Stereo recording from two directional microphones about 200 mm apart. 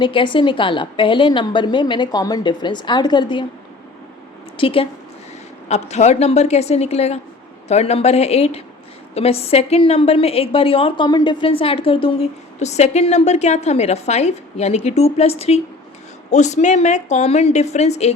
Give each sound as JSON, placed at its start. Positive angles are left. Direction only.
{"t": 0.0, "sound": "a woman's voice", "side_deg": 25}
{"t": 4.5, "sound": "a woman's voice", "side_deg": 25}